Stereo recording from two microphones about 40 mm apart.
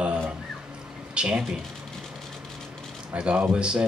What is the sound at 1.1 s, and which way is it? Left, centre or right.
Speech, right.